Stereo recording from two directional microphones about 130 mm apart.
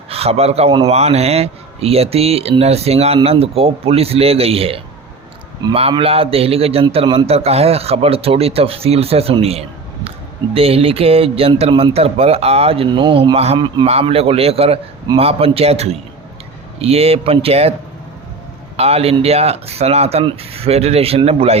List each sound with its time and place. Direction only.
0.1 s a man's voice: 50° right (ahead or behind)
18.8 s speech: 50° right (ahead or behind)